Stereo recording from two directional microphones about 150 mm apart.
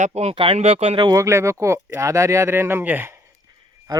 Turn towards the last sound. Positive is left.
turn(degrees=-30)  # may be behind; listen again after turning